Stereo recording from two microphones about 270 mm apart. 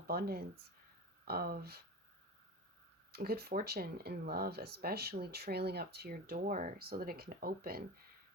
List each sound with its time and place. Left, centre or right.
0.1 s speech: right
3.1 s speech: right